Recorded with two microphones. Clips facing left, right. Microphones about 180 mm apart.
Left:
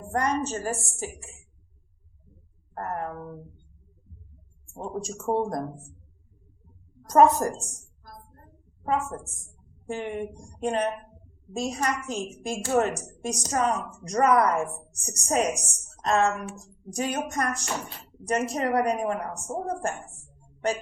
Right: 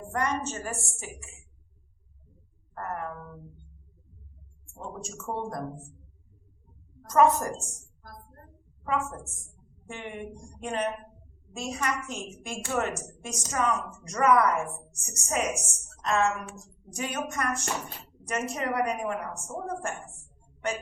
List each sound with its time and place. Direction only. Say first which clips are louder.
0.1 s a woman's voice: left 4 dB; 35° left (ahead or behind)
2.7 s a woman's voice: left 3 dB; 35° left (ahead or behind)
4.7 s a woman's voice: left 6 dB; 35° left (ahead or behind)
7.1 s a woman's voice: left 3 dB; 35° left (ahead or behind)
8.8 s a woman's voice: left 3 dB; 35° left (ahead or behind)